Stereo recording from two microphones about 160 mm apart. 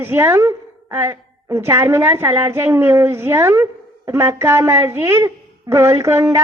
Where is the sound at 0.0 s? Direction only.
15° right (ahead or behind).